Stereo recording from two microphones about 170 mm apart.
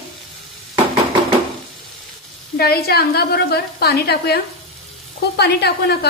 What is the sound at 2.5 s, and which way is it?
A woman's voice, 65° left (ahead or behind).